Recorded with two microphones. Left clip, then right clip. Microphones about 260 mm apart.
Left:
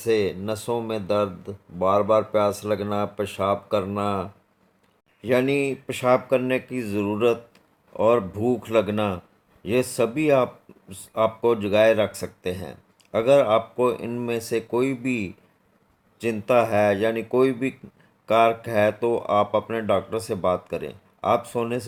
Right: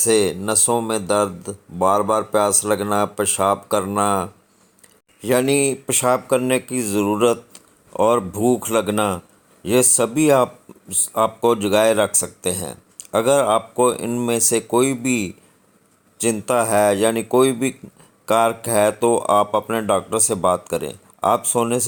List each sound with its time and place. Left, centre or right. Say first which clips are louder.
0.0 s speech: right 5 dB; right